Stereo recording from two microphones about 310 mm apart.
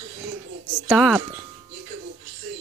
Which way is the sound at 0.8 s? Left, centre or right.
Centre.